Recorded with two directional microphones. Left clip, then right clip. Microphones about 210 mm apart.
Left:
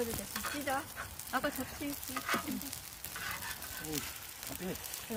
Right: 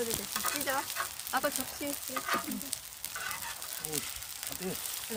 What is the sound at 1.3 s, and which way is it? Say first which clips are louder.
Speech: right 3 dB; 50° right (ahead or behind).